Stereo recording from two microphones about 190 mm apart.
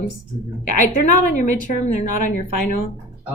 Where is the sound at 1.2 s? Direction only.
40° left (ahead or behind).